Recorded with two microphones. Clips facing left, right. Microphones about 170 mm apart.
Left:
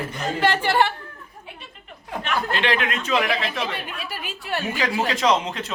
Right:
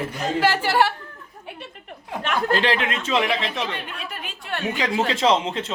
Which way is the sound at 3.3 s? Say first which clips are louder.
Even; centre (ahead or behind).